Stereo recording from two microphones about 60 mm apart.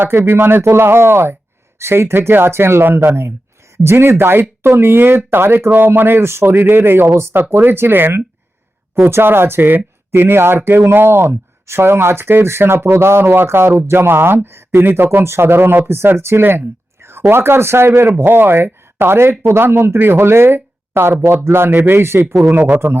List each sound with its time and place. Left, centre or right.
0.3 s speech: right
22.5 s speech: right